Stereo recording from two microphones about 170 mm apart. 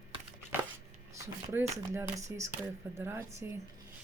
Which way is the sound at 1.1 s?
15° right (ahead or behind).